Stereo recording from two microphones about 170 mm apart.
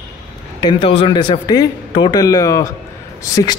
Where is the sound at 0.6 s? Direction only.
35° left (ahead or behind).